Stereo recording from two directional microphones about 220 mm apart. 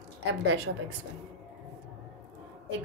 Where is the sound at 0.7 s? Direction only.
60° right (ahead or behind).